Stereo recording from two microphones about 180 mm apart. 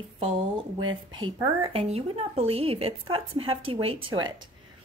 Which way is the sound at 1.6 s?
35° right (ahead or behind).